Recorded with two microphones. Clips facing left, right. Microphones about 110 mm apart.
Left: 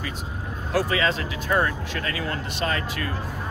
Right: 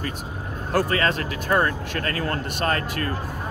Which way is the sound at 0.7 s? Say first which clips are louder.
Right 1 dB; 50° right (ahead or behind).